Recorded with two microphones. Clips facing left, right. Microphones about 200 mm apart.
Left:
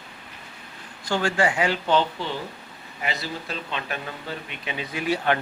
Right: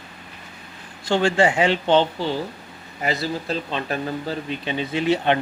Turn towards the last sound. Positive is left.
turn(degrees=-25)  # may be behind; listen again after turning